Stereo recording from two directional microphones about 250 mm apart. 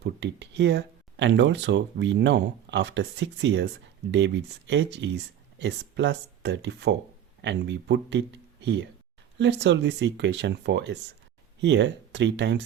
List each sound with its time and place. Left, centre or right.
0.0 s speech: right